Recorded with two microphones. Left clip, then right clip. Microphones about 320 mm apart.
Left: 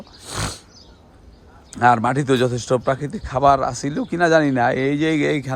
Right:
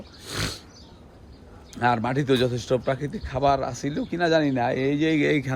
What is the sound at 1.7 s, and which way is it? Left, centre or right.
A man's voice, centre.